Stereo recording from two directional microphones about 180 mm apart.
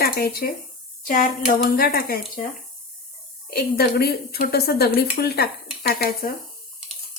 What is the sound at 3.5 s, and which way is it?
Speech, 60° left (ahead or behind).